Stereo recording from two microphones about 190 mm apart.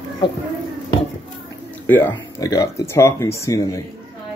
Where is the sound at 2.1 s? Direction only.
20° left (ahead or behind).